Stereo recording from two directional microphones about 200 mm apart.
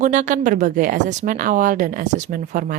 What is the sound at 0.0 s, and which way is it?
A woman's voice, 40° right (ahead or behind).